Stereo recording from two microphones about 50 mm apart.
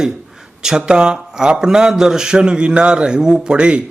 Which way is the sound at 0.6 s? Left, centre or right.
Centre.